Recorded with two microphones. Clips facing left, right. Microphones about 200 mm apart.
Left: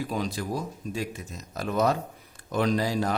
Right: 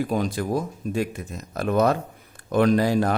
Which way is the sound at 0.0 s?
50° right (ahead or behind).